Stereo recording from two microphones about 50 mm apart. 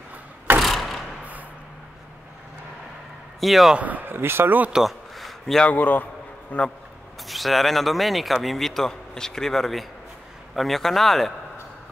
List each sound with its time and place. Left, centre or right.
0.6 s a sound: centre
3.3 s speech: centre
3.7 s speech: right
4.7 s a sound: centre
5.7 s a man's voice: left
7.2 s speech: centre